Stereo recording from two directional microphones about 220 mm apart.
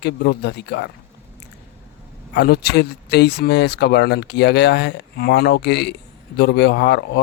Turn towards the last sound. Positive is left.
turn(degrees=50)  # may be behind; listen again after turning